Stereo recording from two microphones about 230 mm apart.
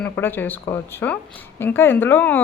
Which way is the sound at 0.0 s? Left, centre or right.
Centre.